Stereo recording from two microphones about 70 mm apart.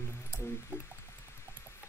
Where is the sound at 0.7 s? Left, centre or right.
Right.